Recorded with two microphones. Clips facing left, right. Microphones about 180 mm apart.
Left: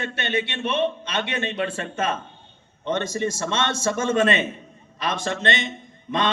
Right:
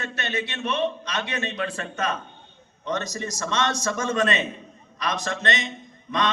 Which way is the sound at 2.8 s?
25° left (ahead or behind).